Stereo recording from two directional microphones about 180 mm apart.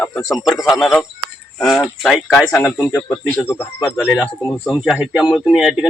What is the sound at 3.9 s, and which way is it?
Speech, centre (ahead or behind).